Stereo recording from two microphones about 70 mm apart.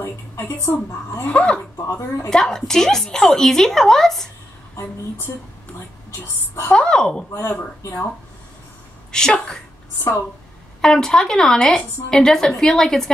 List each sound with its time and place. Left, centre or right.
0.0 s a sound: left
1.2 s a woman's voice: centre
1.9 s a woman's voice: left
2.2 s a woman's voice: centre
6.1 s speech: left
6.7 s a woman's voice: centre
7.3 s speech: left
9.1 s a woman's voice: centre
10.8 s a woman's voice: centre